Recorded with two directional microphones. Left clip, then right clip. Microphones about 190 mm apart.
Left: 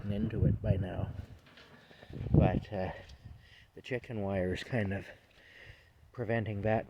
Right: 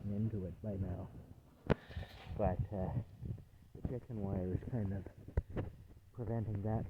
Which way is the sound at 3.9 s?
55° left (ahead or behind).